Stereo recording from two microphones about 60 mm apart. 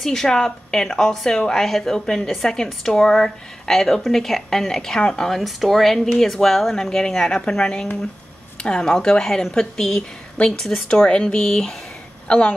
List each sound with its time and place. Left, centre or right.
0.0 s a woman's voice: centre
5.3 s a woman's voice: centre